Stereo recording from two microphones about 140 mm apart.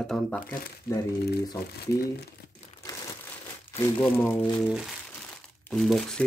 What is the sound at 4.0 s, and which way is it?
Speech, 15° left (ahead or behind).